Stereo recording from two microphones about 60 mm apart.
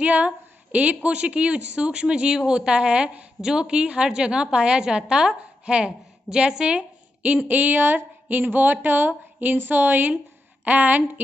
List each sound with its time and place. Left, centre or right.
0.0 s a woman's voice: right
7.4 s a woman's voice: right